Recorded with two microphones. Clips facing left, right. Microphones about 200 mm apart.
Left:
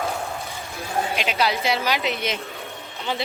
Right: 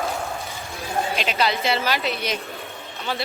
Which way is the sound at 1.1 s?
10° left (ahead or behind).